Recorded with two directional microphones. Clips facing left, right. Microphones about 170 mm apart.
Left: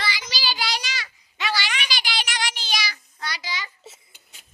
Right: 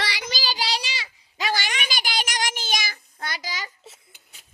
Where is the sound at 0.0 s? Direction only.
65° right (ahead or behind).